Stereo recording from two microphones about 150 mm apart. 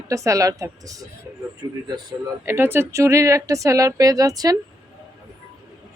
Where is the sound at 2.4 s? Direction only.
15° right (ahead or behind).